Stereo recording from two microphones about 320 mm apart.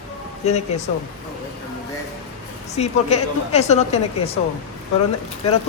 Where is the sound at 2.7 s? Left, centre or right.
Centre.